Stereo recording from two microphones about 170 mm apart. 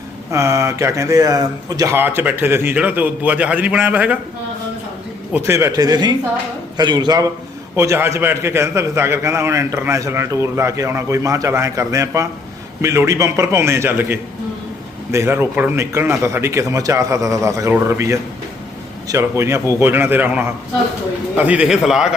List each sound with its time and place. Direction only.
0.3 s a man's voice: 20° right (ahead or behind)
5.3 s a man's voice: 15° right (ahead or behind)